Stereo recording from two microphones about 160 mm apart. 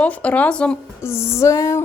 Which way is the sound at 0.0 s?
10° left (ahead or behind).